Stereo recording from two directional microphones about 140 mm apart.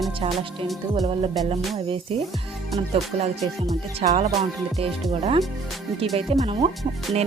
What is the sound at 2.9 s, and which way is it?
Speech, 45° right (ahead or behind).